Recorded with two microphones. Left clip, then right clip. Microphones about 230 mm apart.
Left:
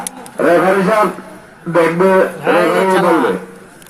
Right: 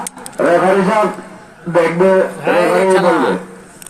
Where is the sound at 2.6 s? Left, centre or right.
Left.